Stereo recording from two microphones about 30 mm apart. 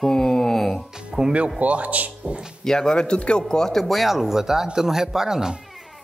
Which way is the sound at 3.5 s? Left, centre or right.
Centre.